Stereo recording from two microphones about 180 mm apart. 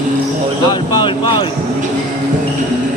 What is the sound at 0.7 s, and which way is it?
Basketball bounce, 25° left (ahead or behind).